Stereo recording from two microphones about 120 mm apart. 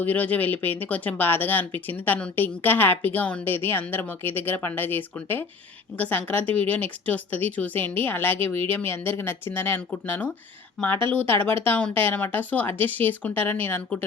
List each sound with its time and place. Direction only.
0.0 s a woman's voice: 15° left (ahead or behind)